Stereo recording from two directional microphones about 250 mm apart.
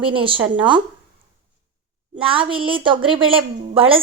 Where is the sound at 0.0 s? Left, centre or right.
Right.